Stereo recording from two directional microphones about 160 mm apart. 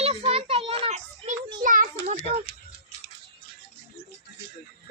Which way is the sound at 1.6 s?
55° right (ahead or behind).